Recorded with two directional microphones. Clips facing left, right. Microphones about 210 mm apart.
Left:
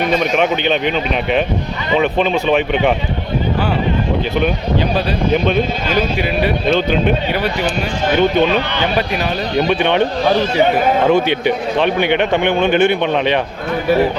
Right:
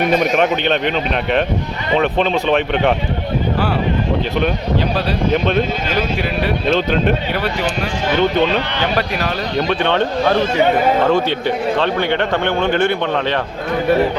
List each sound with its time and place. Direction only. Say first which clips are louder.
0.2 s speech: even; centre (ahead or behind)
6.7 s speech: left 1 dB; centre (ahead or behind)
8.1 s a man's voice: left 2 dB; 15° left (ahead or behind)
11.0 s a man's voice: left 2 dB; 15° left (ahead or behind)